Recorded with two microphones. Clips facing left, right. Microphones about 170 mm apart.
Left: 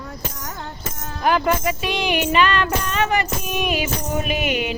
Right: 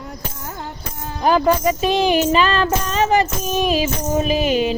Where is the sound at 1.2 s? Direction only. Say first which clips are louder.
Right 4 dB; 35° right (ahead or behind).